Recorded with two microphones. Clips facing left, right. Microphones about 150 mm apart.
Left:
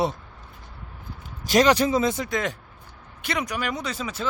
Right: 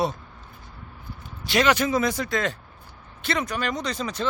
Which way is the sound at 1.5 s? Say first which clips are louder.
Left 3 dB; 35° left (ahead or behind).